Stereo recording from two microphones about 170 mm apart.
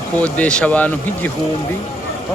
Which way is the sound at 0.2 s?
10° left (ahead or behind).